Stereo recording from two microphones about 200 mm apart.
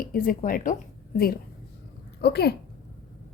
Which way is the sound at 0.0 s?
45° left (ahead or behind).